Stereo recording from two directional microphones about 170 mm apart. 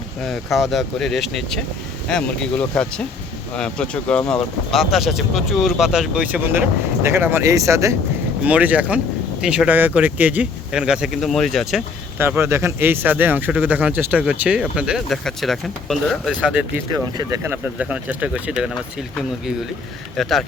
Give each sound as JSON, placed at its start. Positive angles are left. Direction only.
{"t": 0.3, "sound": "speech", "side_deg": 0}
{"t": 8.4, "sound": "speech", "side_deg": -10}
{"t": 12.2, "sound": "speech", "side_deg": -15}
{"t": 16.9, "sound": "speech", "side_deg": -20}
{"t": 17.7, "sound": "speech", "side_deg": -10}